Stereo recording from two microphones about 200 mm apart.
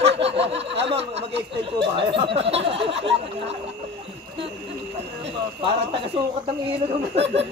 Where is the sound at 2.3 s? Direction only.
30° right (ahead or behind).